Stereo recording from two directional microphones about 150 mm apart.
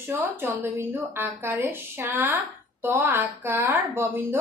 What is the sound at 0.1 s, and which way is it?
A woman's voice, 15° right (ahead or behind).